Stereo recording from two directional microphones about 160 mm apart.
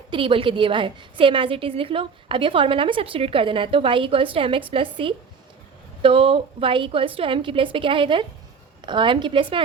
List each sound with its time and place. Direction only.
0.1 s a woman's voice: 30° right (ahead or behind)